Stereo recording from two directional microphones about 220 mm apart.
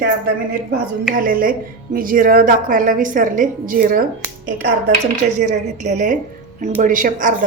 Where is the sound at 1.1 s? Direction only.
40° right (ahead or behind).